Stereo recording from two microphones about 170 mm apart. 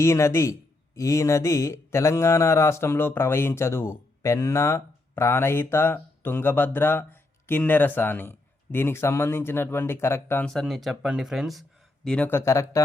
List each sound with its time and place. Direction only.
0.0 s speech: 15° left (ahead or behind)